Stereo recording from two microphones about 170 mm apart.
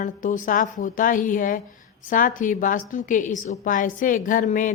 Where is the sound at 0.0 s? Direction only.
50° left (ahead or behind).